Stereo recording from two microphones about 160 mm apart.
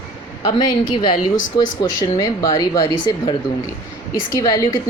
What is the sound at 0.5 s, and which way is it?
Speech, 25° left (ahead or behind).